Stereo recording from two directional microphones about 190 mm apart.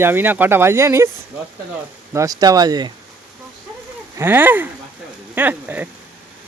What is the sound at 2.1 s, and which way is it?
Speech, 15° right (ahead or behind).